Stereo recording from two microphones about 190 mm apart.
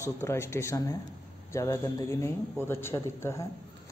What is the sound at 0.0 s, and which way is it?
Speech, 15° left (ahead or behind).